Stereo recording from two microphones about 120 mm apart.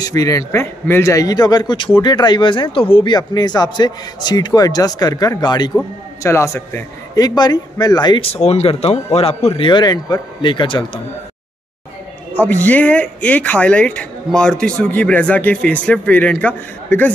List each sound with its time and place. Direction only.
0.0 s a man's voice: 30° left (ahead or behind)
6.2 s a man's voice: 25° left (ahead or behind)
8.2 s speech: 60° left (ahead or behind)
9.6 s a man's voice: 40° left (ahead or behind)
12.4 s speech: 15° left (ahead or behind)